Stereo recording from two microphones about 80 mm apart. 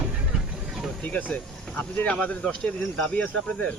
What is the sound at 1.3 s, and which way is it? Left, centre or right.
Speech, centre.